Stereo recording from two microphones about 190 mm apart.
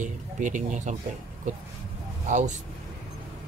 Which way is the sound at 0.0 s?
40° right (ahead or behind).